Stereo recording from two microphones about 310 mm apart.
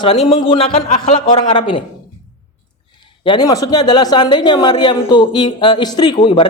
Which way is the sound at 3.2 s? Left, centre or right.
Centre.